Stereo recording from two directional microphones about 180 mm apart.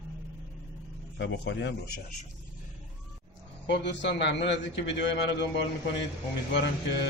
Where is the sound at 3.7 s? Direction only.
75° left (ahead or behind).